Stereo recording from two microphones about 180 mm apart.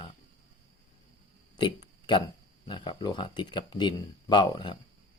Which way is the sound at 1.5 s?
25° left (ahead or behind).